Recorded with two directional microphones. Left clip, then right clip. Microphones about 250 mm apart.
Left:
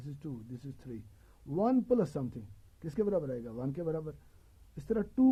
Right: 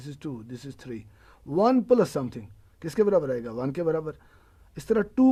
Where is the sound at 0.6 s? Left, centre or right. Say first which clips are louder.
Right 8 dB; centre.